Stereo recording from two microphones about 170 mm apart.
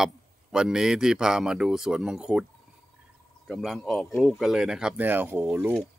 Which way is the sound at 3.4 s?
Centre (ahead or behind).